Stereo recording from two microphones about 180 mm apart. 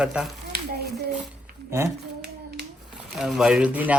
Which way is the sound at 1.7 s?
15° right (ahead or behind).